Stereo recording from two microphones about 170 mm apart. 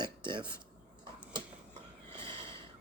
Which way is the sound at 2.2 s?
30° right (ahead or behind).